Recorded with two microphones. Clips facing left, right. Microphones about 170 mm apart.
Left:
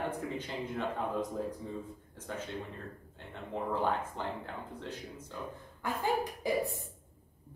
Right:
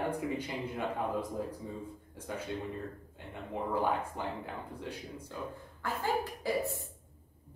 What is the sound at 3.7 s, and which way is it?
Speech, 10° right (ahead or behind).